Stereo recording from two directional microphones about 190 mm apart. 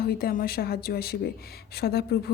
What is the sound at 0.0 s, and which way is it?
A woman's voice, 55° left (ahead or behind).